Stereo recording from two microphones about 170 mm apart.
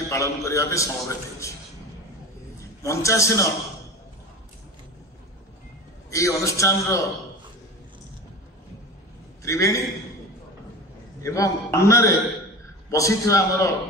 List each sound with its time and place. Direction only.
0.1 s a man's voice: 15° left (ahead or behind)
2.8 s a man's voice: 15° left (ahead or behind)
6.0 s a man's voice: 20° left (ahead or behind)
9.4 s a man's voice: 20° left (ahead or behind)
11.2 s a man's voice: 20° left (ahead or behind)